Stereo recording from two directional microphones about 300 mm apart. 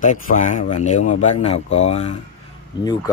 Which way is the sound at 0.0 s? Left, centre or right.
Left.